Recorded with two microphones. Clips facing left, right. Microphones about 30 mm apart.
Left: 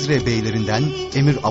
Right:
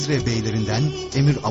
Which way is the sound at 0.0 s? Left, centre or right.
Centre.